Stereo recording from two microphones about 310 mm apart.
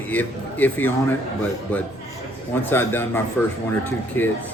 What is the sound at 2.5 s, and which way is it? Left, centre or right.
A man's voice, centre.